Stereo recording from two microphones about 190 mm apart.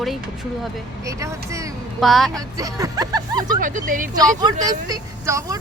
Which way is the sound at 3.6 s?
45° right (ahead or behind).